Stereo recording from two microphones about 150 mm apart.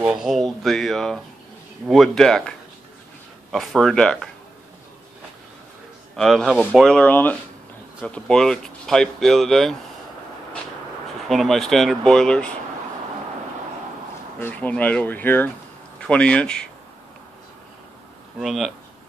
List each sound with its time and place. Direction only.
0.0 s speech: 5° right (ahead or behind)
3.5 s speech: centre (ahead or behind)
6.1 s speech: 5° left (ahead or behind)
6.9 s speech: 10° left (ahead or behind)
11.2 s speech: centre (ahead or behind)
14.4 s speech: 10° left (ahead or behind)
18.4 s speech: centre (ahead or behind)